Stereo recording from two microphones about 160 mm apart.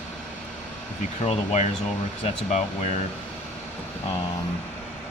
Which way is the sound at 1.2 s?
45° left (ahead or behind).